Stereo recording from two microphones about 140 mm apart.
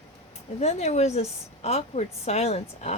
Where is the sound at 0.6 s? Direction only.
50° left (ahead or behind).